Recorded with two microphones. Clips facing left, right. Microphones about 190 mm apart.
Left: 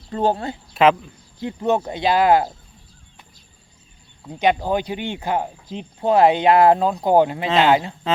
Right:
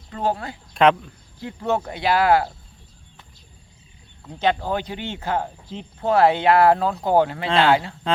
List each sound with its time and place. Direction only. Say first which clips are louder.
0.1 s speech: left 4 dB; 25° left (ahead or behind)
0.7 s speech: left 1 dB; 5° left (ahead or behind)
1.4 s speech: left 3 dB; 20° left (ahead or behind)
4.2 s speech: left 3 dB; 15° left (ahead or behind)